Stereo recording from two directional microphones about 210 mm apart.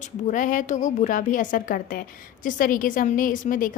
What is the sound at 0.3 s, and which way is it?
A woman's voice, 40° left (ahead or behind).